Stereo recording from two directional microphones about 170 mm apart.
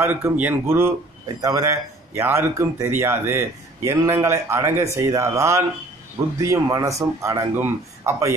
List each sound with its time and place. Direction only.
0.0 s speech: 10° right (ahead or behind)